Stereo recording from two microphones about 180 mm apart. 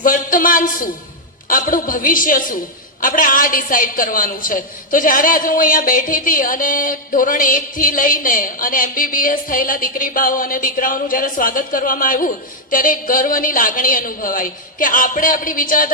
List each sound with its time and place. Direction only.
0.0 s a woman's voice: 50° left (ahead or behind)